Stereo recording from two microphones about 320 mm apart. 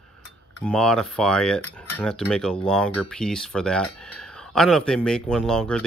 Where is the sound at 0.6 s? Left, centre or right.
Centre.